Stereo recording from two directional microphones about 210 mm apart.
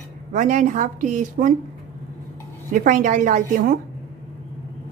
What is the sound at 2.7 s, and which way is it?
Speech, 40° right (ahead or behind).